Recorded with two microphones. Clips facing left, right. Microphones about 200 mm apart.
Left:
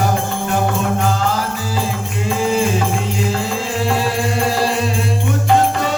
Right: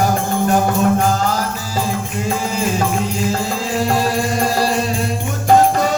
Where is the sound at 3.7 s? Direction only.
40° right (ahead or behind).